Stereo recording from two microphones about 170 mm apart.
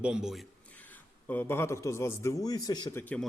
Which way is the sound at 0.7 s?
10° left (ahead or behind).